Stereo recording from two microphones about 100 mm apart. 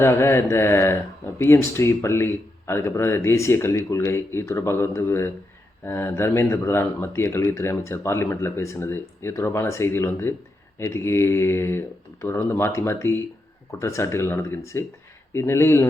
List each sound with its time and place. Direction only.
0.0 s speech: 25° left (ahead or behind)